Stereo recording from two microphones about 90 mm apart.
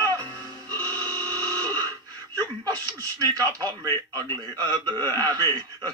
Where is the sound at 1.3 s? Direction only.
40° right (ahead or behind).